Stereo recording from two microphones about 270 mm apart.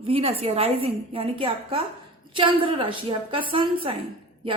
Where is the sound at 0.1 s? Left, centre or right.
Right.